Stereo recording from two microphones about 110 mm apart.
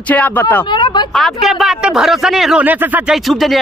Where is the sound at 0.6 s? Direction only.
45° left (ahead or behind).